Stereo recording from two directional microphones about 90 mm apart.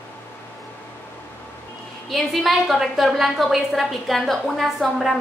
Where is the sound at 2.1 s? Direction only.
Centre (ahead or behind).